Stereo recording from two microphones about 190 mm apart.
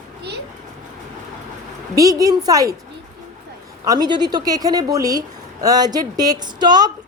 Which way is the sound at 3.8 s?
20° right (ahead or behind).